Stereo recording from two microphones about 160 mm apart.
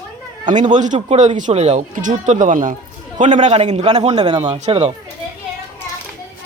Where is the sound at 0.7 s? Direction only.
50° right (ahead or behind).